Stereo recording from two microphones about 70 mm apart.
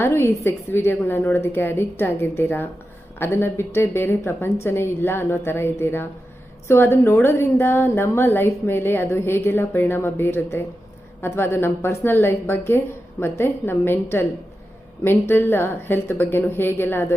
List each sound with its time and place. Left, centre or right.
0.0 s a woman's voice: left